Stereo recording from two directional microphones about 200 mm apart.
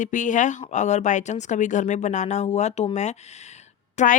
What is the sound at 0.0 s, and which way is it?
A woman's voice, 40° left (ahead or behind).